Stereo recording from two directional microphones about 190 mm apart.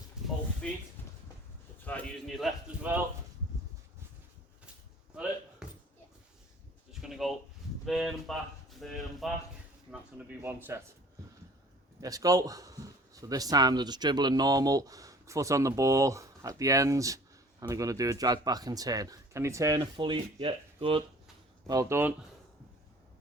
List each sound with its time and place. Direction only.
0.2 s a sound: 5° right (ahead or behind)
1.8 s speech: 5° left (ahead or behind)
5.6 s a sound: 5° right (ahead or behind)
7.0 s speech: centre (ahead or behind)
11.9 s speech: 20° right (ahead or behind)
21.7 s speech: 15° right (ahead or behind)